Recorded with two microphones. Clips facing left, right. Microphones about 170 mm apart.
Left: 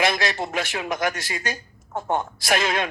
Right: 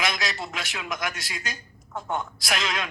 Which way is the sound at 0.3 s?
50° left (ahead or behind).